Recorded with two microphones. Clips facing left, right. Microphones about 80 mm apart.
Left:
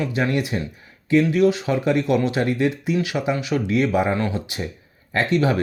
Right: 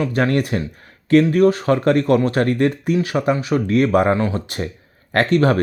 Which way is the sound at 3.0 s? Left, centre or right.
Right.